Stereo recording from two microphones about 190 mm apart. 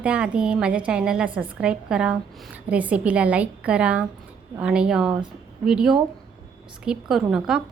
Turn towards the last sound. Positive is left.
turn(degrees=-5)  # may be behind; listen again after turning